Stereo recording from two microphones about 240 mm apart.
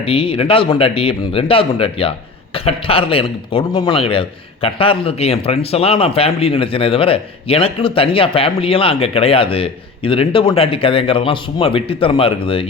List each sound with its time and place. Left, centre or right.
0.0 s speech: left